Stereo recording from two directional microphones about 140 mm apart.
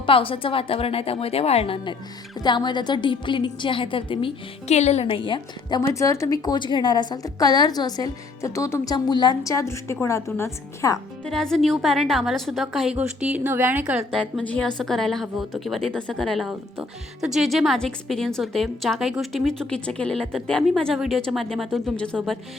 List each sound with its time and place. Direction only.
0.0 s a woman's voice: 40° left (ahead or behind)
4.7 s a woman's voice: 50° left (ahead or behind); by 5.8 s 35° left (ahead or behind)
5.8 s a woman's voice: 20° left (ahead or behind)
11.3 s a woman's voice: 5° left (ahead or behind)
14.1 s a woman's voice: 5° left (ahead or behind)